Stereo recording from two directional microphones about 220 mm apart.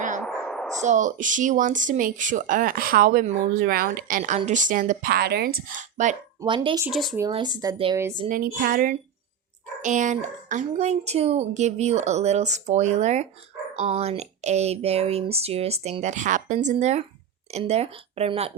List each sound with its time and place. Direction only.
0.2 s a sound: 5° left (ahead or behind)
0.8 s speech: 35° right (ahead or behind)
6.4 s speech: 20° right (ahead or behind)
6.8 s speech: centre (ahead or behind)
7.3 s speech: 20° right (ahead or behind)
8.3 s speech: 40° right (ahead or behind)